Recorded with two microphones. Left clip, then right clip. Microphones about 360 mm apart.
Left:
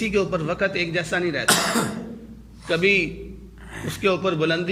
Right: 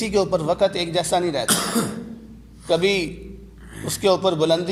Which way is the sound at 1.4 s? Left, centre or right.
Left.